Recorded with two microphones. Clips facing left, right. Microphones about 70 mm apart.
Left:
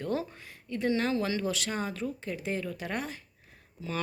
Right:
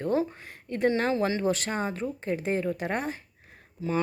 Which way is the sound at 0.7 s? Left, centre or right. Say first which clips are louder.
Right 4 dB; right.